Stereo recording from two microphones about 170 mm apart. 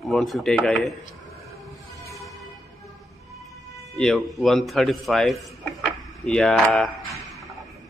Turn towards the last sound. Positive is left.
turn(degrees=0)  # may be behind; listen again after turning